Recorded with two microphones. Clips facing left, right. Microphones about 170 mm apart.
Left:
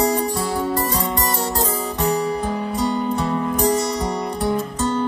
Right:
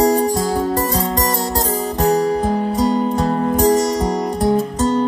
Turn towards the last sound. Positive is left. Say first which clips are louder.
# right 5 dB
turn(degrees=-40)  # may be behind; listen again after turning